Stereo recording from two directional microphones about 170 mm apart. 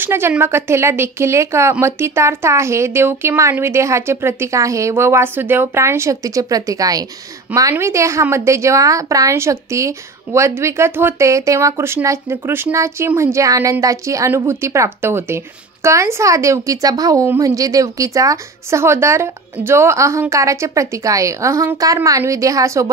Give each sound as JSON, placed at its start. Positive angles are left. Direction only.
{"t": 0.0, "sound": "a woman's voice", "side_deg": -15}